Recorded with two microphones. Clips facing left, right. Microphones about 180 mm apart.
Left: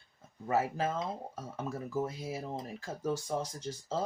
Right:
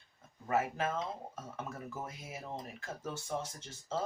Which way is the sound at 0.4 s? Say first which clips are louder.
Left 2 dB; 30° left (ahead or behind).